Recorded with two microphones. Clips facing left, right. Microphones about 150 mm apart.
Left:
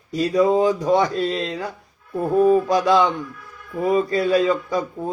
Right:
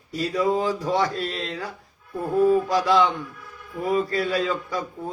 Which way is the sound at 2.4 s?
20° left (ahead or behind).